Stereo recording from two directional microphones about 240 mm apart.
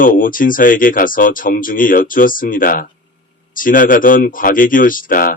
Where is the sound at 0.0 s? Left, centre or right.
Left.